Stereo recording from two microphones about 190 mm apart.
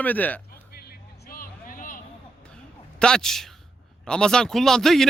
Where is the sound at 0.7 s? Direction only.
55° left (ahead or behind).